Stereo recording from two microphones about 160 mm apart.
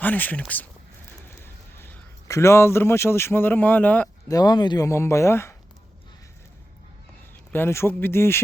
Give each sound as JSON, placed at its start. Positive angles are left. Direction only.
{"t": 0.0, "sound": "speech", "side_deg": 10}
{"t": 4.3, "sound": "speech", "side_deg": 25}
{"t": 7.5, "sound": "speech", "side_deg": 15}